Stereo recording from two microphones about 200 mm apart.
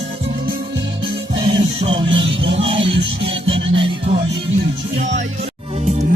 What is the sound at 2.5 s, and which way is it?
Music, 25° right (ahead or behind).